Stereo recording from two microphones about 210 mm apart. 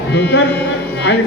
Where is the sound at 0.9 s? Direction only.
55° left (ahead or behind).